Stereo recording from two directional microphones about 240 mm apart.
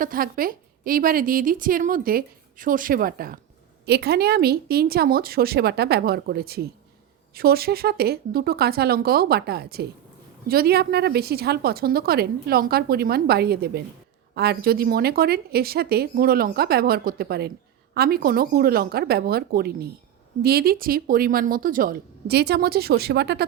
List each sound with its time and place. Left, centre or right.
0.0 s a woman's voice: right